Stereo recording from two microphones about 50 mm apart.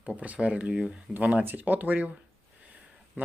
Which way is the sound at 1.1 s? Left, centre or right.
Right.